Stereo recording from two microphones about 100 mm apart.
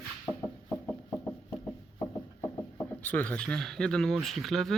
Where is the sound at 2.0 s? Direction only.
30° left (ahead or behind).